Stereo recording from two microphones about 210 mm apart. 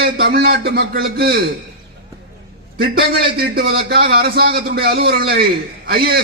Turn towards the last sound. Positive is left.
turn(degrees=-50)  # may be behind; listen again after turning